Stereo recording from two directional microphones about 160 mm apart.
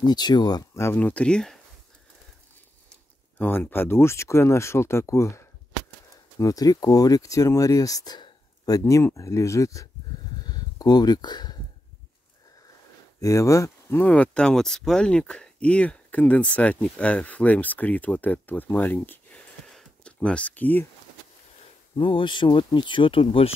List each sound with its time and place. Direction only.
0.0 s speech: 25° left (ahead or behind); by 1.6 s 5° left (ahead or behind)
3.3 s speech: 15° left (ahead or behind)
10.4 s a sound: 25° left (ahead or behind)
13.2 s speech: 20° left (ahead or behind)
21.9 s speech: 30° left (ahead or behind)